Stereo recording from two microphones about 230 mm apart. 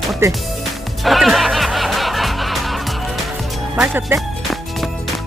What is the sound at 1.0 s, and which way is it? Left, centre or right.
Music, centre.